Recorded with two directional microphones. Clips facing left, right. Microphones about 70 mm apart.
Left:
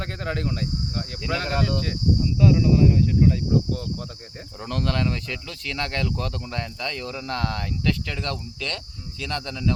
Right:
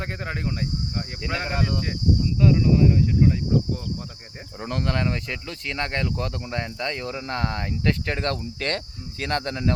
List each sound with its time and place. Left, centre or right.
0.0 s speech: centre; by 9.7 s right